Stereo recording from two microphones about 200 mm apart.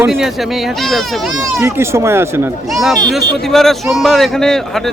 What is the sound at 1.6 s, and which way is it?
Speech, 15° right (ahead or behind).